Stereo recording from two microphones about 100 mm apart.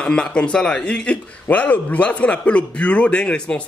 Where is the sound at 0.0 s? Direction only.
10° left (ahead or behind).